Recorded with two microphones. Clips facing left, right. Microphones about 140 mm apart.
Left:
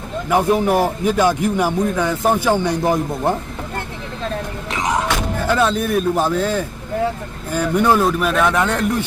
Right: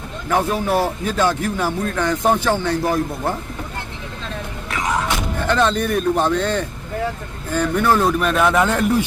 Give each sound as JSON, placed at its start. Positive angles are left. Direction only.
{"t": 0.3, "sound": "speech", "side_deg": 15}
{"t": 4.7, "sound": "music", "side_deg": 20}
{"t": 5.4, "sound": "a man's voice", "side_deg": 5}
{"t": 8.0, "sound": "a man's voice", "side_deg": 0}